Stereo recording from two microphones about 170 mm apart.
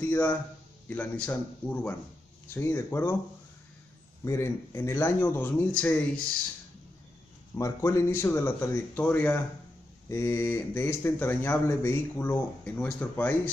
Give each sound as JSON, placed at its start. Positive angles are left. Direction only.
{"t": 0.0, "sound": "speech", "side_deg": 10}
{"t": 4.2, "sound": "speech", "side_deg": 15}
{"t": 7.5, "sound": "speech", "side_deg": 20}